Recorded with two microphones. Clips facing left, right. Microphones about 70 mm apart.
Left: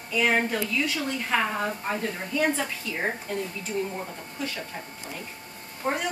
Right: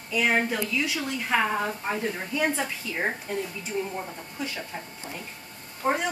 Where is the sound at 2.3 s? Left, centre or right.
Centre.